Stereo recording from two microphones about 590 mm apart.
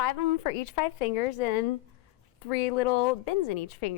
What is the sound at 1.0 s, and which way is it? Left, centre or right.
A woman's voice, left.